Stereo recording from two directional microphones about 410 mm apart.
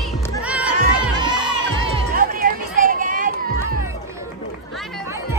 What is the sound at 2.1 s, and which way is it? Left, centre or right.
Music, centre.